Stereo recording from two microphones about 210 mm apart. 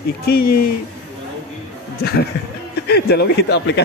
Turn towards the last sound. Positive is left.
turn(degrees=55)  # may be behind; listen again after turning